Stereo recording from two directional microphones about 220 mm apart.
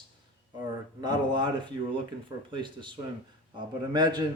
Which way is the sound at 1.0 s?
20° right (ahead or behind).